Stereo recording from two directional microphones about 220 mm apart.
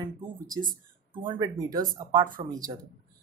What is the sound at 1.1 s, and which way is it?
Speech, 20° right (ahead or behind).